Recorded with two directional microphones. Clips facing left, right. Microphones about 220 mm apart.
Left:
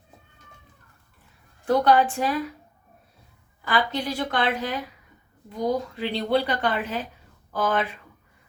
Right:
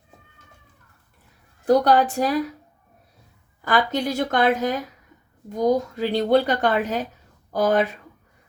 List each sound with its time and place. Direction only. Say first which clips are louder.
1.6 s speech: right 2 dB; 40° right (ahead or behind)
3.6 s a woman's voice: right 4 dB; 45° right (ahead or behind)